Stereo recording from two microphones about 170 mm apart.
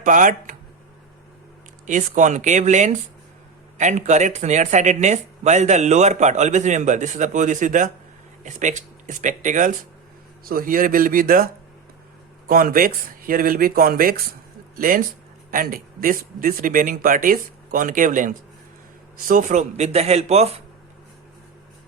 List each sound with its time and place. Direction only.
0.0 s speech: 50° right (ahead or behind)
1.9 s speech: 45° right (ahead or behind)
12.5 s speech: 60° right (ahead or behind); by 20.6 s 40° right (ahead or behind)